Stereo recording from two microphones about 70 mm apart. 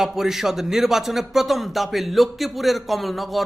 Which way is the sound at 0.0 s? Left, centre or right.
Centre.